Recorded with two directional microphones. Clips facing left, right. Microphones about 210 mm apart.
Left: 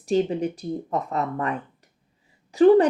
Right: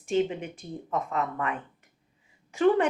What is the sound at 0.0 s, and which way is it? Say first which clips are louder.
A woman's voice: left 4 dB; 35° left (ahead or behind).